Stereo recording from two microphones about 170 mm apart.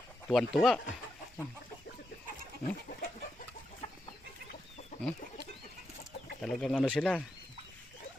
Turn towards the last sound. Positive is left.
turn(degrees=5)  # may be behind; listen again after turning